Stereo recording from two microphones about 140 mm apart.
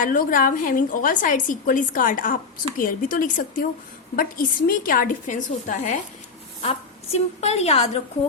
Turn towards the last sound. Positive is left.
turn(degrees=50)  # may be behind; listen again after turning